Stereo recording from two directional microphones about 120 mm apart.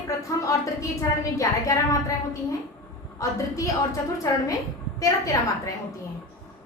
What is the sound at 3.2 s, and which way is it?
A woman's voice, 30° left (ahead or behind).